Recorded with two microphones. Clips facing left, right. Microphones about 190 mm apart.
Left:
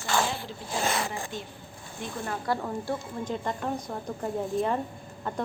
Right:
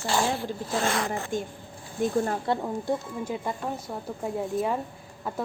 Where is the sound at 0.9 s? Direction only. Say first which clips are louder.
Right 3 dB; 10° left (ahead or behind).